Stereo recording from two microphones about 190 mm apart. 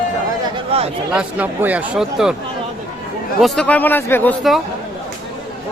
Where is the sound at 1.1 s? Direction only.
5° right (ahead or behind).